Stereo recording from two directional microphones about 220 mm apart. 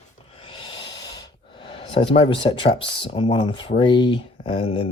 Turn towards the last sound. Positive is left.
turn(degrees=25)  # may be behind; listen again after turning